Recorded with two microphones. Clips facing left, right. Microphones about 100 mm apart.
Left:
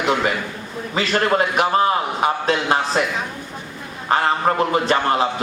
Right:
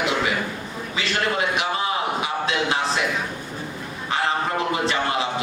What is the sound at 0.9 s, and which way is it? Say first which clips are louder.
A man's voice: left 6 dB; 45° left (ahead or behind).